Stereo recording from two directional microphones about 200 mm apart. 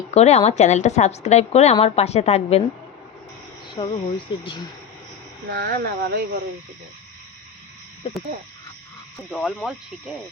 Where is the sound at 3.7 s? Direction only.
25° left (ahead or behind).